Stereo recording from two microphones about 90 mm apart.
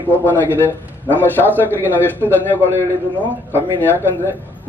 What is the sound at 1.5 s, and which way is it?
A man's voice, 25° left (ahead or behind).